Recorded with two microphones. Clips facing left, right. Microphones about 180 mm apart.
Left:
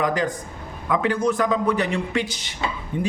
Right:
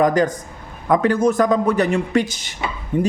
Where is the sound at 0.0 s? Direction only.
45° right (ahead or behind).